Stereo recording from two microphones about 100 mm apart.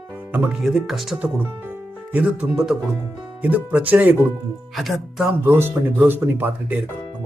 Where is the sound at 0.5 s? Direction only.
Centre (ahead or behind).